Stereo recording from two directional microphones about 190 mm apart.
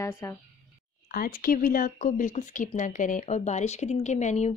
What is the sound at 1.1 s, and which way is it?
Speech, 50° left (ahead or behind).